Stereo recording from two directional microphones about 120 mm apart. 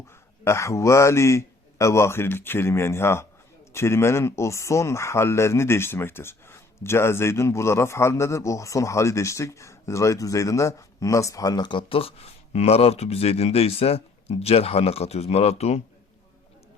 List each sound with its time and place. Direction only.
0.4 s speech: 25° left (ahead or behind); by 15.8 s 60° left (ahead or behind)